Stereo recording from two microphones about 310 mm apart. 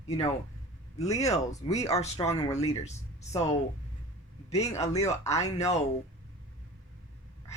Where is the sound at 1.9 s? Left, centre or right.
Left.